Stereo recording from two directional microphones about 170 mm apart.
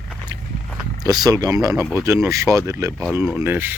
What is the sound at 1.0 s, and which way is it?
Speech, 20° right (ahead or behind).